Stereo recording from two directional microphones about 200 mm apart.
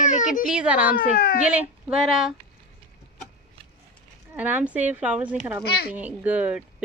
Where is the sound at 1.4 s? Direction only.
5° right (ahead or behind).